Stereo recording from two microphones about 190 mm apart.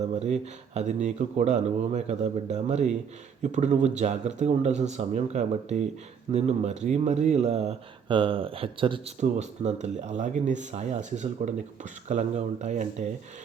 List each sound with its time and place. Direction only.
0.0 s speech: 35° right (ahead or behind)